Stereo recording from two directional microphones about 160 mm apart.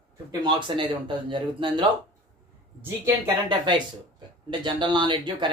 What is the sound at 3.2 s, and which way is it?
Speech, 30° right (ahead or behind).